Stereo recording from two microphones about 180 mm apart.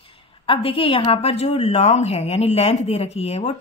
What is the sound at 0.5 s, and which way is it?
Speech, 30° left (ahead or behind).